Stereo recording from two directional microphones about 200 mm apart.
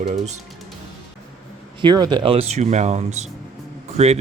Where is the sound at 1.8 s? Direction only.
20° right (ahead or behind).